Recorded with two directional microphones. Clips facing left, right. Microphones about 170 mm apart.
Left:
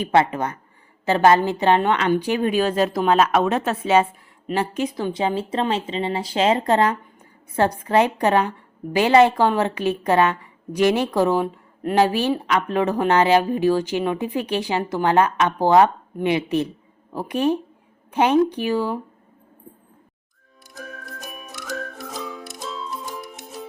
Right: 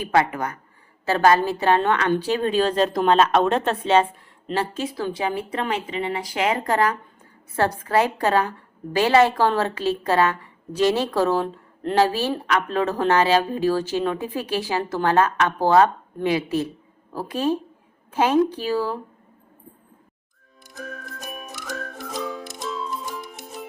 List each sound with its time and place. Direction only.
0.0 s speech: 25° left (ahead or behind)